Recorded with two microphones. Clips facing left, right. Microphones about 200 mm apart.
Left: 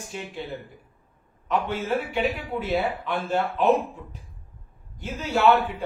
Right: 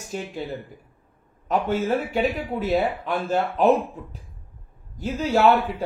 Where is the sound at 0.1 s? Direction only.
40° right (ahead or behind).